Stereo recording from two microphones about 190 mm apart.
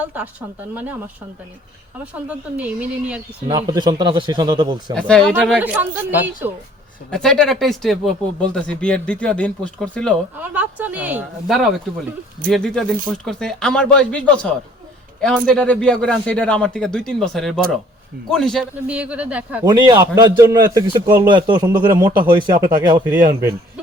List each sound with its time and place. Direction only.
0.0 s speech: 10° right (ahead or behind)
2.1 s speech: 10° right (ahead or behind)
3.4 s speech: 20° right (ahead or behind)
4.9 s speech: 5° left (ahead or behind)
5.5 s speech: 10° right (ahead or behind)
7.1 s speech: 5° left (ahead or behind)
10.3 s speech: 10° right (ahead or behind)
19.6 s speech: 20° right (ahead or behind)
23.0 s speech: 10° right (ahead or behind)